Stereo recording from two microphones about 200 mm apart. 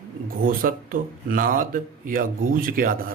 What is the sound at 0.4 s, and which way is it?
Speech, 45° right (ahead or behind).